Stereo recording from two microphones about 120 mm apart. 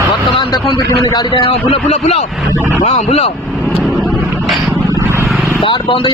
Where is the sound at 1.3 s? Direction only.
50° left (ahead or behind).